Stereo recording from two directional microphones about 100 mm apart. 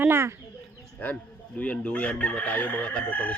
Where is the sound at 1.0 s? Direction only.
15° left (ahead or behind).